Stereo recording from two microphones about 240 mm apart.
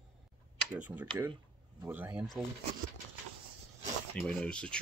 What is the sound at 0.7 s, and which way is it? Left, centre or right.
Speech, centre.